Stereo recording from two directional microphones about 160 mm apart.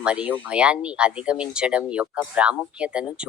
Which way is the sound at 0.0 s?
5° right (ahead or behind).